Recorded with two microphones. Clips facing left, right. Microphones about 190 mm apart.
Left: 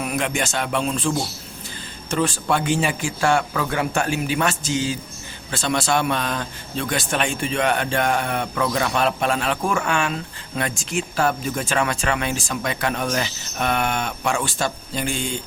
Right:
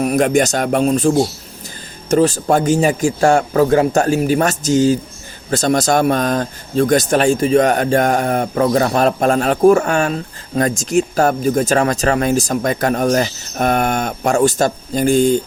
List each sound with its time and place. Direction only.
0.0 s speech: 40° right (ahead or behind)